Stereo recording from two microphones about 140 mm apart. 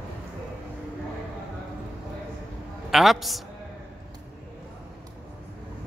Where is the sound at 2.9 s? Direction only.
Centre (ahead or behind).